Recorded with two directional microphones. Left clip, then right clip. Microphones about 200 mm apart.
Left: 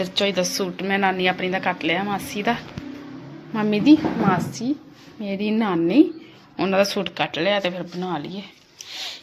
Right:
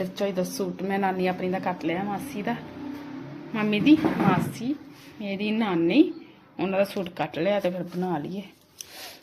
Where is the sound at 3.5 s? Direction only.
25° left (ahead or behind).